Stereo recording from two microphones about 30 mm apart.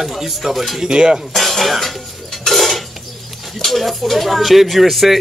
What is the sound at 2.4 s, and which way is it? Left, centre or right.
Cutlery, centre.